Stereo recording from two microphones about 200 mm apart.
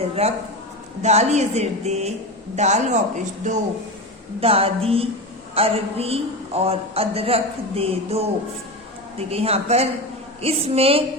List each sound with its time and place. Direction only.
1.0 s a woman's voice: 35° right (ahead or behind)